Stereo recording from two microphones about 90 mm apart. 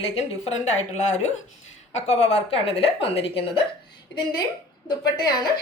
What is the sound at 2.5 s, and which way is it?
A woman's voice, 90° left.